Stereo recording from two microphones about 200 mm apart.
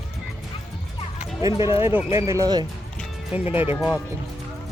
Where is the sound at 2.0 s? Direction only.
15° right (ahead or behind).